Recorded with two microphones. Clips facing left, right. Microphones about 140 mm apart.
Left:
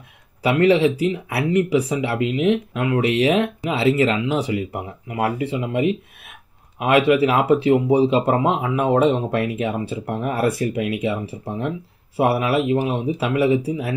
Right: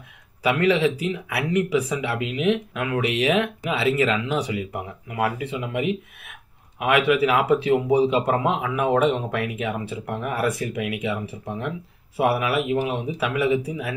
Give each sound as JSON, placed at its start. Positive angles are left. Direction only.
{"t": 0.4, "sound": "speech", "side_deg": 30}
{"t": 12.2, "sound": "speech", "side_deg": 30}